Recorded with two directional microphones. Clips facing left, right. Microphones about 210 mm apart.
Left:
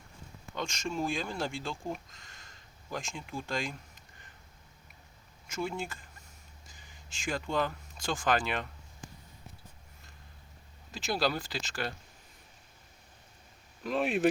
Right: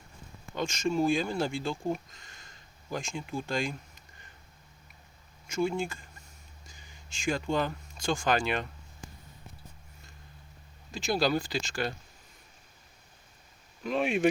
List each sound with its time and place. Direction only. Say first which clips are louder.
0.5 s speech: right 6 dB; centre (ahead or behind)
5.5 s speech: right 6 dB; 5° left (ahead or behind)
10.9 s speech: right 4 dB; 5° left (ahead or behind)
13.8 s speech: right 2 dB; centre (ahead or behind)